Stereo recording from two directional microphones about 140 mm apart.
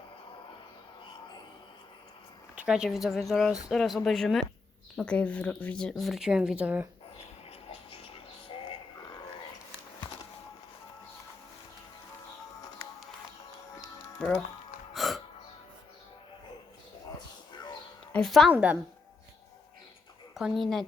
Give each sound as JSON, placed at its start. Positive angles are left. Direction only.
{"t": 2.6, "sound": "speech", "side_deg": -5}
{"t": 7.7, "sound": "music", "side_deg": 45}
{"t": 14.2, "sound": "speech", "side_deg": 10}
{"t": 14.9, "sound": "music", "side_deg": 0}
{"t": 17.5, "sound": "a sound", "side_deg": 30}
{"t": 18.1, "sound": "a woman's voice", "side_deg": 0}
{"t": 18.5, "sound": "a woman's voice", "side_deg": -10}
{"t": 20.3, "sound": "speech", "side_deg": 0}